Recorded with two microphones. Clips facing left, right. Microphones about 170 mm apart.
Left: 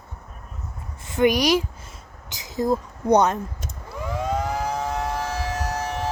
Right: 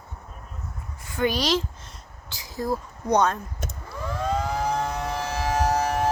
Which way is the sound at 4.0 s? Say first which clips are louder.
Left 2 dB; 15° left (ahead or behind).